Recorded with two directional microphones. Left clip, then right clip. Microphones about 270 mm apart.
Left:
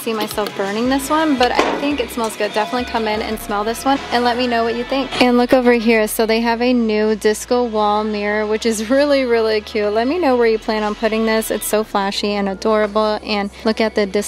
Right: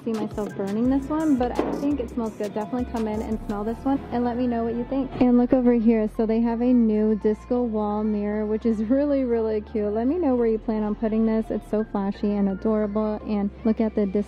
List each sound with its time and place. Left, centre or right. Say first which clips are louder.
0.4 s speech: left 8 dB; centre
7.5 s speech: left 10 dB; left
8.1 s speech: left 8 dB; centre